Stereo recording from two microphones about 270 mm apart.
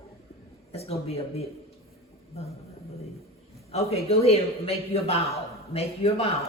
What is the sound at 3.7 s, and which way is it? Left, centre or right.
A man's voice, left.